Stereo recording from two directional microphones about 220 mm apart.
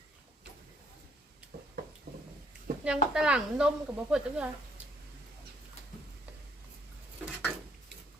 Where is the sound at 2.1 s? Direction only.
45° right (ahead or behind).